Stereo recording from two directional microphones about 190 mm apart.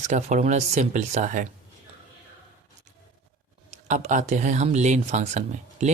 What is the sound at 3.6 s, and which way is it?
Speech, 40° right (ahead or behind).